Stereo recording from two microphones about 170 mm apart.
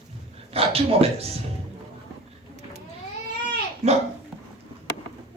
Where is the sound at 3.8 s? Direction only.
40° right (ahead or behind).